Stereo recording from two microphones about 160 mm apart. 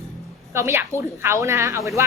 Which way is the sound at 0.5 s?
15° right (ahead or behind).